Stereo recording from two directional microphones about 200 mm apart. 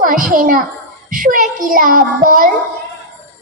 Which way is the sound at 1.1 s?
45° right (ahead or behind).